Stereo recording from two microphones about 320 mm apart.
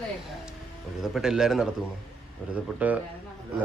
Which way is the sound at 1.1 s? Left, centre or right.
Centre.